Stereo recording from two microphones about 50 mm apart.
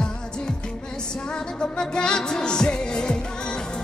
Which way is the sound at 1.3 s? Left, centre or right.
Centre.